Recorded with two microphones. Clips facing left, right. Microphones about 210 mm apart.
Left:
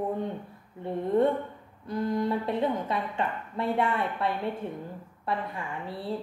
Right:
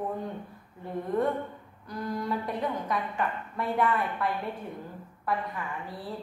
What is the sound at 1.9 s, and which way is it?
A woman's voice, 25° left (ahead or behind).